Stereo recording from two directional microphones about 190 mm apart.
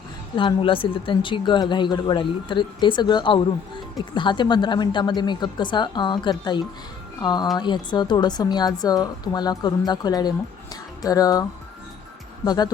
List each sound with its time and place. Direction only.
0.3 s speech: 25° left (ahead or behind)
12.5 s speech: 20° left (ahead or behind)